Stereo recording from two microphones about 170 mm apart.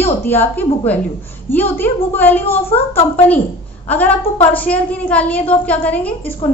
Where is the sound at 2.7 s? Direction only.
35° left (ahead or behind).